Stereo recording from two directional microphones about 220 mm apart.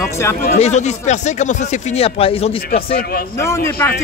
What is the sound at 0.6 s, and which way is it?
Speech, 30° left (ahead or behind).